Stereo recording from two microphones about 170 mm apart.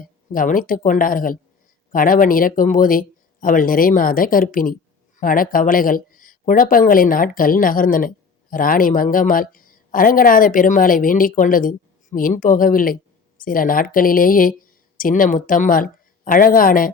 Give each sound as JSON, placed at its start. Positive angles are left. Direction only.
{"t": 0.0, "sound": "speech", "side_deg": 55}